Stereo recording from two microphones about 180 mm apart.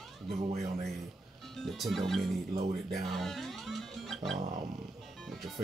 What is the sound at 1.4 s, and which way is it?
Music, centre (ahead or behind).